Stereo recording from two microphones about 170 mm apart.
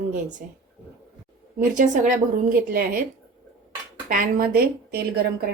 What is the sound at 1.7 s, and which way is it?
A woman's voice, 50° right (ahead or behind).